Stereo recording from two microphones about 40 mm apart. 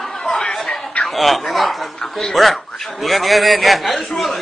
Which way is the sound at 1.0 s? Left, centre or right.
Centre.